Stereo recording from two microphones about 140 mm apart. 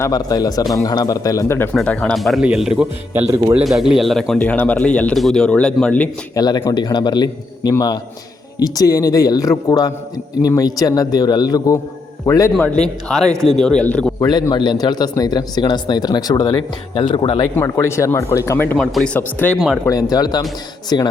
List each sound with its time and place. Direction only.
0.0 s a man's voice: 25° left (ahead or behind); by 6.1 s 10° left (ahead or behind)
6.3 s a man's voice: 30° left (ahead or behind)
12.6 s speech: 5° left (ahead or behind)
14.2 s a man's voice: 30° left (ahead or behind)
16.9 s speech: 40° left (ahead or behind)
17.5 s a man's voice: 20° left (ahead or behind)
18.8 s speech: centre (ahead or behind)
19.5 s speech: centre (ahead or behind)
19.9 s a man's voice: 30° left (ahead or behind)